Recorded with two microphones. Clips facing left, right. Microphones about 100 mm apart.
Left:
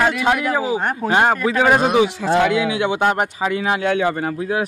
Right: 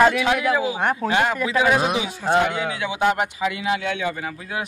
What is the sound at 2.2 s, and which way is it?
Speech, 90° left.